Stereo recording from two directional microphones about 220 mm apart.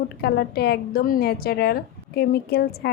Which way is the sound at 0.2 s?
45° left (ahead or behind).